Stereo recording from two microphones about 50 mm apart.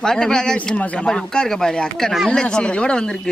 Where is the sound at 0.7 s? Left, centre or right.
Left.